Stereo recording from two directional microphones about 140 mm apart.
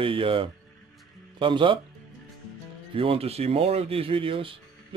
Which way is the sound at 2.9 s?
40° right (ahead or behind).